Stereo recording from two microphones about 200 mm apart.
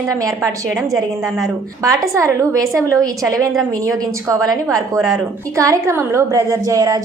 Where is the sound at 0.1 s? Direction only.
15° right (ahead or behind).